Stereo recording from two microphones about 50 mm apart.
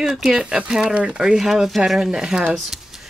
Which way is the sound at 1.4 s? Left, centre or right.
Centre.